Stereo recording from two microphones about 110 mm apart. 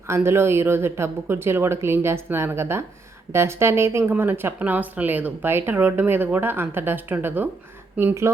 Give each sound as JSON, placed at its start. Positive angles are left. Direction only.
{"t": 0.1, "sound": "speech", "side_deg": -25}